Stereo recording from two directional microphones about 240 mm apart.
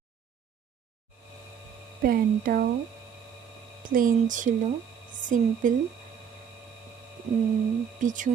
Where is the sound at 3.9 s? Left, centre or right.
Right.